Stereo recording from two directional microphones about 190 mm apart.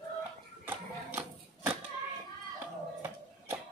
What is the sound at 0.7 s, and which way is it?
Music, 10° right (ahead or behind).